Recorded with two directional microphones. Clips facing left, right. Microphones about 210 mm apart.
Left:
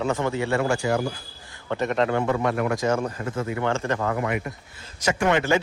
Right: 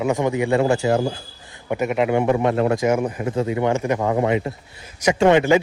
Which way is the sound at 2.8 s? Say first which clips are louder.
Right 4 dB; 15° right (ahead or behind).